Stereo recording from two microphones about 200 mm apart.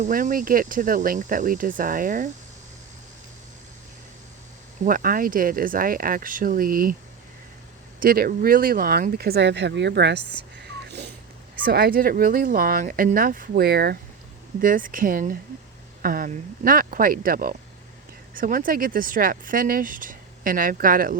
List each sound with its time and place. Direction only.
0.0 s speech: 45° right (ahead or behind)
4.8 s speech: 45° right (ahead or behind)
8.0 s speech: 45° right (ahead or behind)
11.7 s speech: 50° right (ahead or behind)